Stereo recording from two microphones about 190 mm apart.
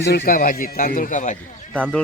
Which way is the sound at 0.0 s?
60° left (ahead or behind).